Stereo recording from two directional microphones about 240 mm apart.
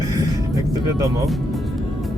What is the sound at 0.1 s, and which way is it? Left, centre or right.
Music, centre.